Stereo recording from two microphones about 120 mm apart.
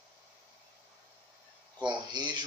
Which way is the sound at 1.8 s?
40° right (ahead or behind).